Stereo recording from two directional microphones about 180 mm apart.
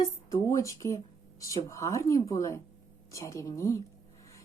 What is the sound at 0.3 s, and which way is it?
Speech, 15° left (ahead or behind).